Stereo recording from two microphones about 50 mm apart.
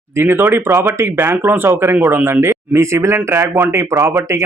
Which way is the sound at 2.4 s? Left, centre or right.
Right.